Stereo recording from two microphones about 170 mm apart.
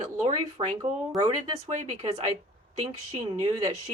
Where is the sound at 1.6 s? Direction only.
40° right (ahead or behind).